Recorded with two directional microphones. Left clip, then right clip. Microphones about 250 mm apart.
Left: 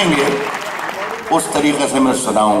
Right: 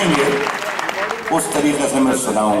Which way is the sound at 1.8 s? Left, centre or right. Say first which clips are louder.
Left 2 dB; centre.